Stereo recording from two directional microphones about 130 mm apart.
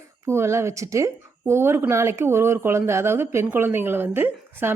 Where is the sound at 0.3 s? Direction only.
20° right (ahead or behind).